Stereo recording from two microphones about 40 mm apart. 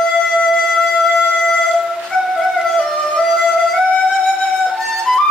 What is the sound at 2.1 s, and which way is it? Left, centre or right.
Music, centre.